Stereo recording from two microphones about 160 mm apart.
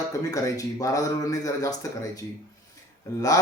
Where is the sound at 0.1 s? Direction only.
20° left (ahead or behind).